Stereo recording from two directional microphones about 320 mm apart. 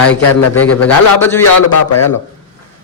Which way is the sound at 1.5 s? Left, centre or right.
Left.